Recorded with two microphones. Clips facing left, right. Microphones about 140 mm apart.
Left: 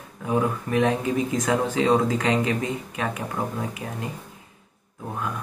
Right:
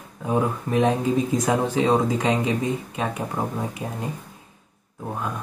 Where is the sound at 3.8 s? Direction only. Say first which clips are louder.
Right 2 dB; 20° right (ahead or behind).